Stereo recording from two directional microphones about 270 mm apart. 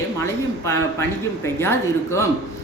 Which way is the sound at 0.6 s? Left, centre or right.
Centre.